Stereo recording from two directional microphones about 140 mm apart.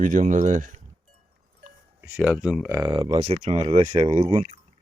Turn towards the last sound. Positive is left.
turn(degrees=-45)  # may be behind; listen again after turning